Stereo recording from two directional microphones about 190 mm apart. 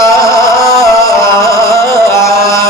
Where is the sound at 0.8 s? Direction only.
15° left (ahead or behind).